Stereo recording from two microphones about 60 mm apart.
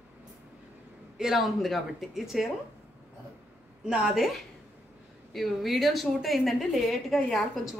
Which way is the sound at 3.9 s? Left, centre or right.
Centre.